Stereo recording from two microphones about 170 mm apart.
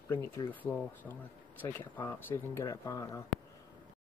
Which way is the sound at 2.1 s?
15° left (ahead or behind).